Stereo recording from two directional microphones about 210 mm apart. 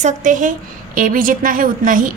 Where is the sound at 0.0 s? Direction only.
40° right (ahead or behind).